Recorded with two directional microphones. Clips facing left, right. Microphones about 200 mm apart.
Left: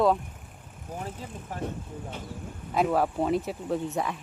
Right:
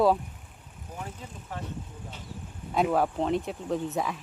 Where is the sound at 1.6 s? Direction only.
55° left (ahead or behind).